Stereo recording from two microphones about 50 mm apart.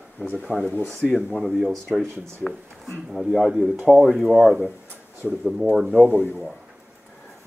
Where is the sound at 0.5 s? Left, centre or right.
Centre.